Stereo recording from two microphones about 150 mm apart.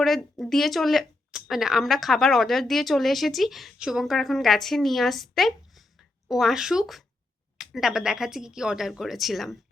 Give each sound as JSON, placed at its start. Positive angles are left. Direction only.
{"t": 0.0, "sound": "speech", "side_deg": 0}